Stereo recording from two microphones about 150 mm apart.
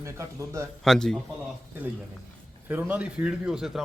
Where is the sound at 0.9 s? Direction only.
5° left (ahead or behind).